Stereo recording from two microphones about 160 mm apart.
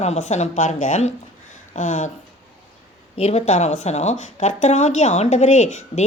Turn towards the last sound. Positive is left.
turn(degrees=45)  # may be behind; listen again after turning